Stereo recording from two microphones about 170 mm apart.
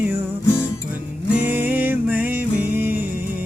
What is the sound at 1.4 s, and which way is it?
Music, 10° right (ahead or behind).